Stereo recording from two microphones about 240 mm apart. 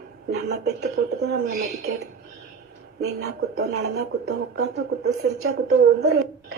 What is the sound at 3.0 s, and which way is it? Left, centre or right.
Speech, right.